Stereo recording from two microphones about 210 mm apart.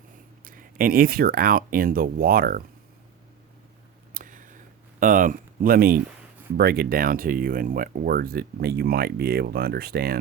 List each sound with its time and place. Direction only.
0.4 s speech: 40° right (ahead or behind)
4.1 s a sound: 40° right (ahead or behind)
4.9 s speech: 40° right (ahead or behind)